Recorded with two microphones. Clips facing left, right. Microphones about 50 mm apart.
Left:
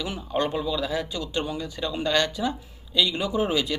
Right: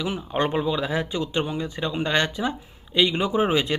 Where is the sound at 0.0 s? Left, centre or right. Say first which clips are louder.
Right 2 dB; right.